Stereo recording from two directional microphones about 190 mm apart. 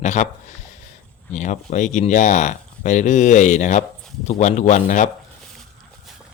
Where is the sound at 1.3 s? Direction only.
40° left (ahead or behind).